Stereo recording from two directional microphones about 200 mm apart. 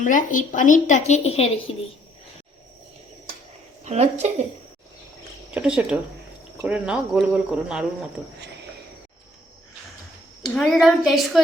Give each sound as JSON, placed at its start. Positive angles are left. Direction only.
{"t": 0.0, "sound": "a woman's voice", "side_deg": 40}
{"t": 3.8, "sound": "speech", "side_deg": -35}
{"t": 5.5, "sound": "speech", "side_deg": -5}
{"t": 10.4, "sound": "speech", "side_deg": 0}